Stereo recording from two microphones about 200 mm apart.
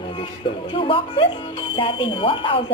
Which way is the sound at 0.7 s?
25° left (ahead or behind).